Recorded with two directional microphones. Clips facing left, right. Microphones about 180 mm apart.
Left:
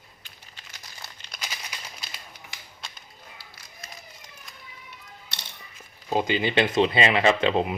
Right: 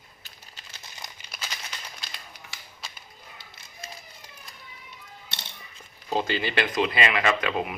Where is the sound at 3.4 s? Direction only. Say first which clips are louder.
Right 2 dB; 25° right (ahead or behind).